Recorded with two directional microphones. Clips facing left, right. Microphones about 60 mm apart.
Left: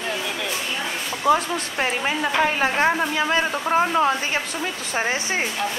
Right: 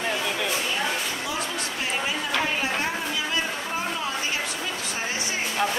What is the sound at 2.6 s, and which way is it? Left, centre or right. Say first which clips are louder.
Speech: left 7 dB; left.